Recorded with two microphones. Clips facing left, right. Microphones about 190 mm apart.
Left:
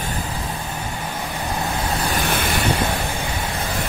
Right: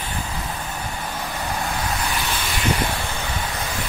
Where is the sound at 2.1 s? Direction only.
55° left (ahead or behind).